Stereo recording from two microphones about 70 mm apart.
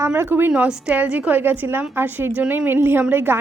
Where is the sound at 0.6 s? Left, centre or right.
Centre.